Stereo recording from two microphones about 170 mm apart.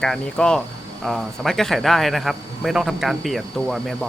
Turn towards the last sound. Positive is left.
turn(degrees=0)  # may be behind; listen again after turning